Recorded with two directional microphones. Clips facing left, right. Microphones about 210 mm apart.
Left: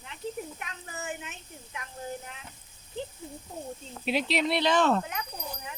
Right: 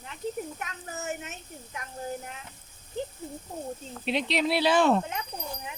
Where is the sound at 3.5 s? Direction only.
50° right (ahead or behind).